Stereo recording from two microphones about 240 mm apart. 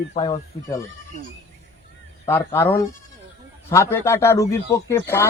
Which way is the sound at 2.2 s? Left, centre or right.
Centre.